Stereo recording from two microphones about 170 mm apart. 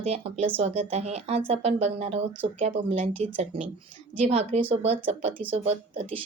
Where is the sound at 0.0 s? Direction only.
40° right (ahead or behind).